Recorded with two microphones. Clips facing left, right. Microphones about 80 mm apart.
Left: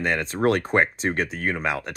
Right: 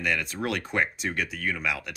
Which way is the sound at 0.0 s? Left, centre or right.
Left.